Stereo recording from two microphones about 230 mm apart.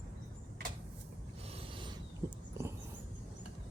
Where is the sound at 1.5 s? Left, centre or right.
Right.